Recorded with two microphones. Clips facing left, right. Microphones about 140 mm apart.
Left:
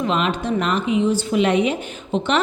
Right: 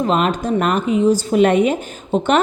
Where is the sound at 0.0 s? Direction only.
45° right (ahead or behind).